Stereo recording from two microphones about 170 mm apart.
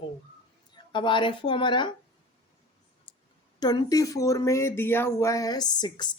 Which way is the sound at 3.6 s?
25° left (ahead or behind).